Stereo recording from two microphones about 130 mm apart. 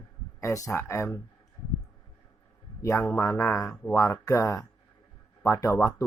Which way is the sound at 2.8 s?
20° left (ahead or behind).